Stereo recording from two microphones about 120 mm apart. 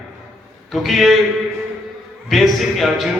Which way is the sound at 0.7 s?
Centre (ahead or behind).